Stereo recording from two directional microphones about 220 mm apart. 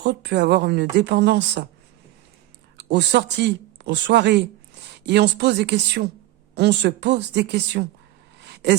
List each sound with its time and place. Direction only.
0.0 s speech: 50° right (ahead or behind)
2.7 s a woman's voice: 50° right (ahead or behind)
8.4 s a sound: 50° right (ahead or behind)